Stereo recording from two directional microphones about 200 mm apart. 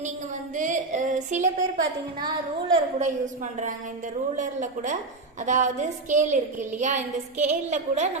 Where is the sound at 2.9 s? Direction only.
35° right (ahead or behind).